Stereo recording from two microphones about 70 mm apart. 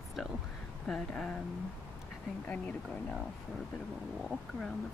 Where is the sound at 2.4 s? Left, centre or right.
Left.